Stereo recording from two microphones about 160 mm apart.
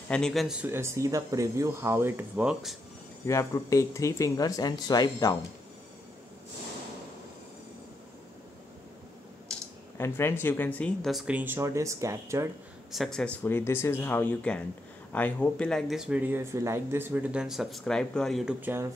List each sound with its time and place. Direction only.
0.1 s speech: 5° left (ahead or behind)
3.3 s speech: 20° left (ahead or behind)
9.9 s speech: 15° left (ahead or behind); by 12.4 s 20° right (ahead or behind)
12.9 s speech: centre (ahead or behind)